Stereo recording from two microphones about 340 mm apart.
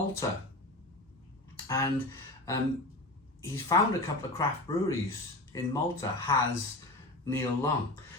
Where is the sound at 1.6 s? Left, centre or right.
Centre.